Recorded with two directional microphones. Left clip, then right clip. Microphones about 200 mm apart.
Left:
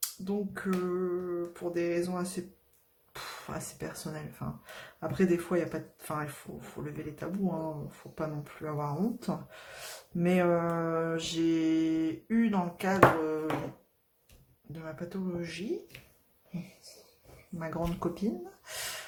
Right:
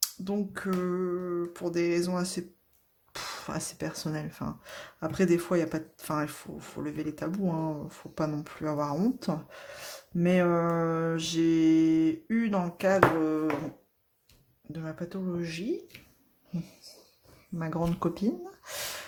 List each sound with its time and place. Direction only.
0.0 s speech: 40° right (ahead or behind)
14.7 s speech: 35° right (ahead or behind)
15.9 s a sound: centre (ahead or behind)
17.6 s speech: 35° right (ahead or behind)